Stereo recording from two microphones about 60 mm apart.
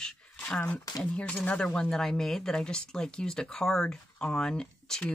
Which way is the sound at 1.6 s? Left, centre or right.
Centre.